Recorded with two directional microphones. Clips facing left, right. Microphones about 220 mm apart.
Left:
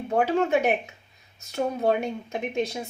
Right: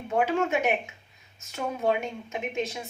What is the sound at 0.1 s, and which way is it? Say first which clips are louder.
Speech: left 3 dB; 35° left (ahead or behind).